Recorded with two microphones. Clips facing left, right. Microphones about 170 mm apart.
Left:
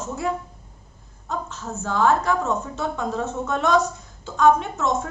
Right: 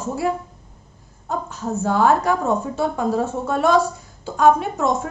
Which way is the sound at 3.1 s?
35° right (ahead or behind).